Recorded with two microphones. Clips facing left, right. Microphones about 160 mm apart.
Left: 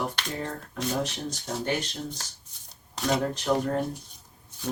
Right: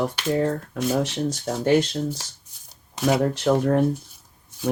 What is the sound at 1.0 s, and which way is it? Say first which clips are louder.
Speech: right 7 dB; 80° right.